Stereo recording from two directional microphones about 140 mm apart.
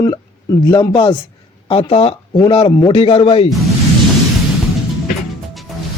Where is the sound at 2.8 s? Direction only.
40° left (ahead or behind).